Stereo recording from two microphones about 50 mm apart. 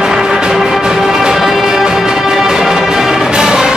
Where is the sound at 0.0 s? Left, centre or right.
Centre.